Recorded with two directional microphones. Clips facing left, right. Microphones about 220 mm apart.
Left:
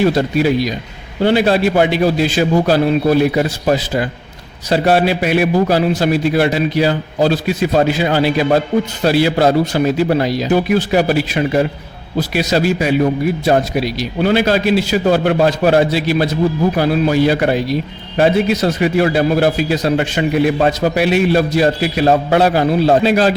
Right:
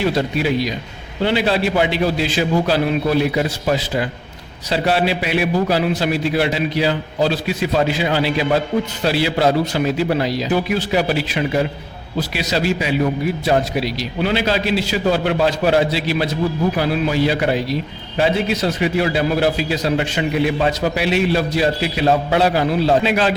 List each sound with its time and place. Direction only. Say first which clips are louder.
1.2 s a man's voice: left 5 dB; 45° left (ahead or behind)